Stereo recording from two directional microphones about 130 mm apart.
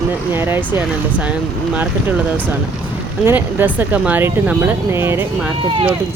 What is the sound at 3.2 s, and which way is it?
Speech, 15° right (ahead or behind).